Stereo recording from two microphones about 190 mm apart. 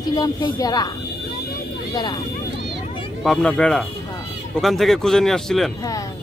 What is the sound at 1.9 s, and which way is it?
Speech, 20° left (ahead or behind).